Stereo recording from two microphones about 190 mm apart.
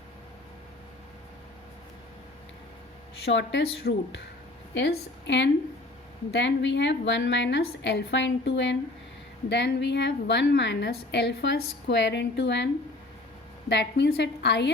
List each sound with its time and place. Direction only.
3.2 s a woman's voice: 65° left (ahead or behind)
4.7 s a woman's voice: 70° left (ahead or behind)